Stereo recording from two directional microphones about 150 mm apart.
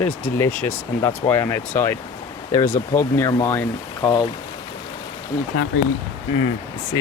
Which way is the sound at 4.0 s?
30° left (ahead or behind).